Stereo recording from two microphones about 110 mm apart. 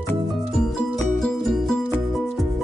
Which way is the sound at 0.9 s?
5° left (ahead or behind).